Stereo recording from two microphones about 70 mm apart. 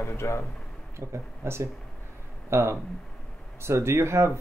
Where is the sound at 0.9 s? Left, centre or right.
Right.